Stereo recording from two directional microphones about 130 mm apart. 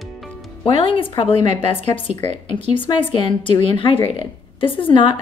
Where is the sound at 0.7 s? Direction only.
45° left (ahead or behind).